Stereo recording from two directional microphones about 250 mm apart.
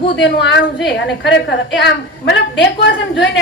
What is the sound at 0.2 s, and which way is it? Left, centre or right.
A woman's voice, left.